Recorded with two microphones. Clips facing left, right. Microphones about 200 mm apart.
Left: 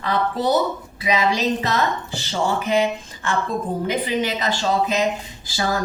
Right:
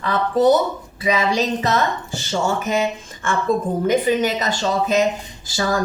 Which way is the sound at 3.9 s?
45° right (ahead or behind).